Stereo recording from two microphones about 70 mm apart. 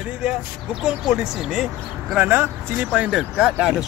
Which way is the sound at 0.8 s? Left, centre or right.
Centre.